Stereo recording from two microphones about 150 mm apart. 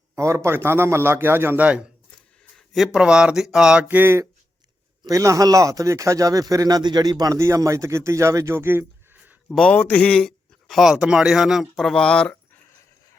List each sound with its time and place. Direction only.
0.2 s a man's voice: 20° right (ahead or behind)
9.5 s a man's voice: 5° left (ahead or behind)